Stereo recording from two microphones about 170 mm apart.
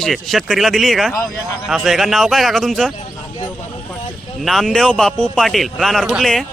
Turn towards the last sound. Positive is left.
turn(degrees=0)  # may be behind; listen again after turning